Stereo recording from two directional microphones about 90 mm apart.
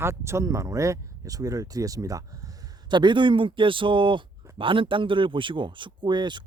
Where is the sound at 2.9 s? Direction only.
60° right (ahead or behind).